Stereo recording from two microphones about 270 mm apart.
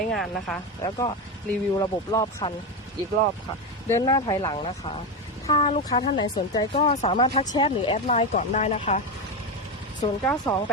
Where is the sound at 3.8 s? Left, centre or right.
Centre.